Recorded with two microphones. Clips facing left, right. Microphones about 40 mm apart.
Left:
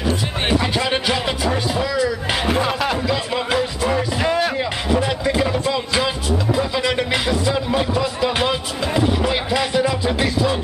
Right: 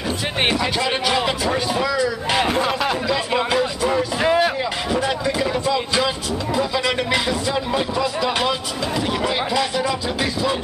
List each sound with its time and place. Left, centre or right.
0.6 s speech: centre
2.5 s music: centre
4.6 s music: centre